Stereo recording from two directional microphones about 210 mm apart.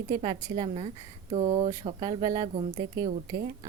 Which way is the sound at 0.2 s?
20° right (ahead or behind).